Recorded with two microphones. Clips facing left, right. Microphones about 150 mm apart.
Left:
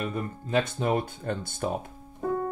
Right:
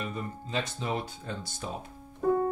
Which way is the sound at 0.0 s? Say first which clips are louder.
Left 4 dB; 55° left (ahead or behind).